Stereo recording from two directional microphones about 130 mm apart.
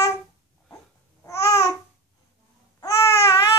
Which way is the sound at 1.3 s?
25° left (ahead or behind).